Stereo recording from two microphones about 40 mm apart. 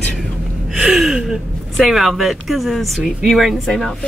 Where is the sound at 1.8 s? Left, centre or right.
Centre.